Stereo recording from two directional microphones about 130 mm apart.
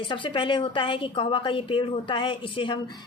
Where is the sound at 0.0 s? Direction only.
40° left (ahead or behind).